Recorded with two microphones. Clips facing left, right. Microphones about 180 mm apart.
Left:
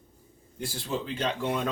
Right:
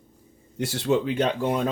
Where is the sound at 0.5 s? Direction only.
75° right (ahead or behind); by 1.6 s 50° right (ahead or behind).